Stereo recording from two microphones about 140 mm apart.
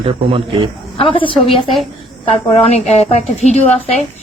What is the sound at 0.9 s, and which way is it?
Speech, 40° left (ahead or behind).